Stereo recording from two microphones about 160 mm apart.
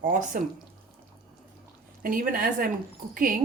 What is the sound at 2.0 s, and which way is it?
Dishes, 60° right (ahead or behind).